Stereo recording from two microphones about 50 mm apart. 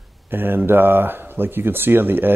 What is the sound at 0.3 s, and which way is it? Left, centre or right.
A man's voice, right.